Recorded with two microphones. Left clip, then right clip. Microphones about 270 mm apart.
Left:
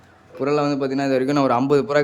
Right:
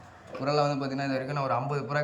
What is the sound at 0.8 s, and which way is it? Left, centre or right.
A man's voice, left.